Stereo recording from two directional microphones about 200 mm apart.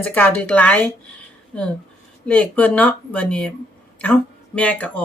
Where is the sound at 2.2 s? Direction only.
5° left (ahead or behind).